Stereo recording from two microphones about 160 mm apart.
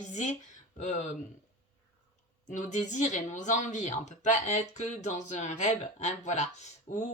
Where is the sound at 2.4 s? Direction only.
50° left (ahead or behind).